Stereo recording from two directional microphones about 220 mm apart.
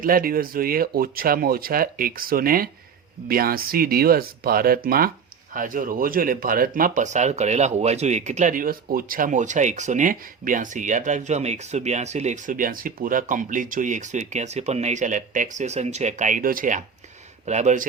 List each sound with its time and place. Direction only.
0.0 s speech: 40° right (ahead or behind)